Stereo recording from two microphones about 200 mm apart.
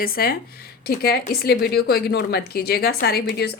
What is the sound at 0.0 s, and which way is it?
A woman's voice, 50° left (ahead or behind).